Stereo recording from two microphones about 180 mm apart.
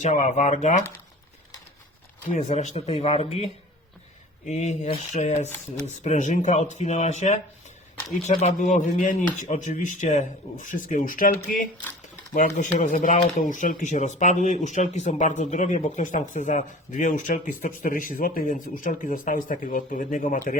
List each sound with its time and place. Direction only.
0.0 s speech: 40° left (ahead or behind)
2.3 s speech: 45° left (ahead or behind)